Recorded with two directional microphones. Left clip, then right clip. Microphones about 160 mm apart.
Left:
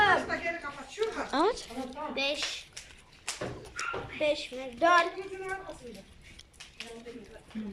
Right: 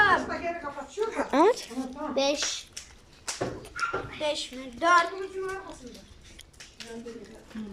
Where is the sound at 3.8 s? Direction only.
10° left (ahead or behind).